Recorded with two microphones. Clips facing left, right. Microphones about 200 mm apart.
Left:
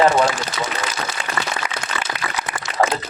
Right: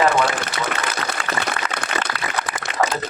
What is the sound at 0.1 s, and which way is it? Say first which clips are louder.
Speech: left 2 dB; 60° right (ahead or behind).